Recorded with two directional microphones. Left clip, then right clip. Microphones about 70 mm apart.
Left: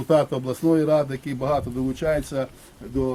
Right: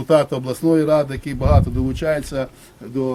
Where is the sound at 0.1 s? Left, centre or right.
Right.